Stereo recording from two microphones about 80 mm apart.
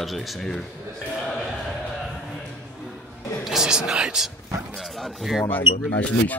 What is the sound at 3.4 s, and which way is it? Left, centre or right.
Speech, centre.